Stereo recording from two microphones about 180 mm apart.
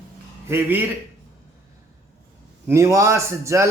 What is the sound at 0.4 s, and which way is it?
Speech, 10° right (ahead or behind).